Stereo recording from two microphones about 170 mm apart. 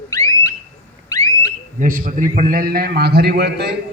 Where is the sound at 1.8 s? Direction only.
50° right (ahead or behind); by 3.7 s 75° right (ahead or behind).